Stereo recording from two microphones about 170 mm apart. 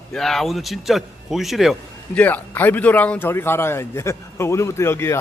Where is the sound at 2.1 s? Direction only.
10° left (ahead or behind).